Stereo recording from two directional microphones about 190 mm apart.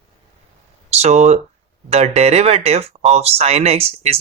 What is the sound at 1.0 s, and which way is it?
Speech, 35° right (ahead or behind).